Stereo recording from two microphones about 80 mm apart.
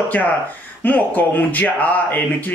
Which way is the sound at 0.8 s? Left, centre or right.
Left.